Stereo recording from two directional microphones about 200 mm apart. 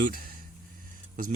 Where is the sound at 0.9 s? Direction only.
40° right (ahead or behind).